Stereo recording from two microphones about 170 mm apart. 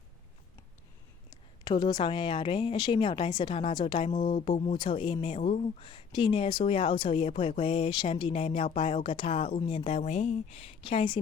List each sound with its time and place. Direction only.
1.6 s a woman's voice: 25° left (ahead or behind)